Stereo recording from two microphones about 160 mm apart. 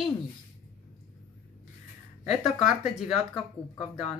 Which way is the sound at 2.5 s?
Centre (ahead or behind).